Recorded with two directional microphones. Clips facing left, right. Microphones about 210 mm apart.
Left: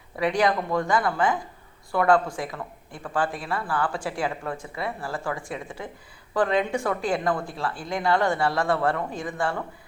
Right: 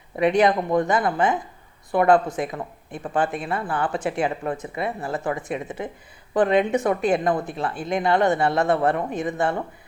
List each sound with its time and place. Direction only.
0.2 s speech: 20° right (ahead or behind)